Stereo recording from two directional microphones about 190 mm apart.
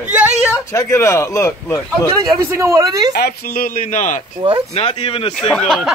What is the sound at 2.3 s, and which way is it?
Speech, 15° right (ahead or behind).